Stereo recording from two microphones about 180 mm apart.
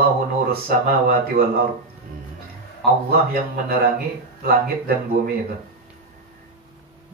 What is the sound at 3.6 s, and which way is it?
Speech, 60° right (ahead or behind).